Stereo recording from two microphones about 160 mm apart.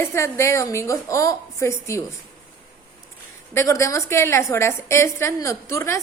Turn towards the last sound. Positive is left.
turn(degrees=15)  # may be behind; listen again after turning